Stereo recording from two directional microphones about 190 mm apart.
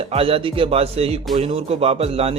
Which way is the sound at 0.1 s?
30° right (ahead or behind).